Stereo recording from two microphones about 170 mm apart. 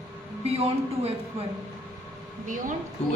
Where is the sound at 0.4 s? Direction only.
35° right (ahead or behind).